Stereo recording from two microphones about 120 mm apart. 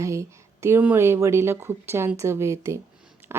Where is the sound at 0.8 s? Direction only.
15° right (ahead or behind).